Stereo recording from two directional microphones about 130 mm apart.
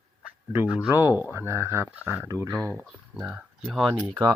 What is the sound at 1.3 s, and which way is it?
Speech, 20° right (ahead or behind).